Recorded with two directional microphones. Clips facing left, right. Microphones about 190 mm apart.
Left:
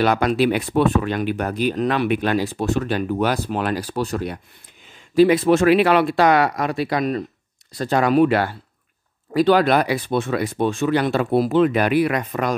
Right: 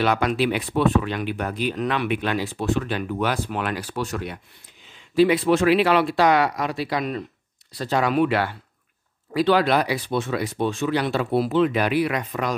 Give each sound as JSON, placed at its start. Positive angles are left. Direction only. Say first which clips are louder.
{"t": 0.0, "sound": "speech", "louder": "left 3 dB", "side_deg": 40}